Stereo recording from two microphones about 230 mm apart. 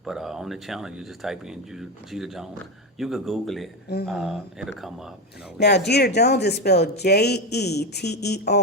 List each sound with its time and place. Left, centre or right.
0.0 s speech: centre
5.5 s speech: left